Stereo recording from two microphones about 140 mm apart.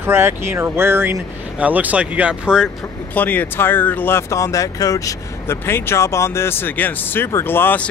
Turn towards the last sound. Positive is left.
turn(degrees=15)  # may be behind; listen again after turning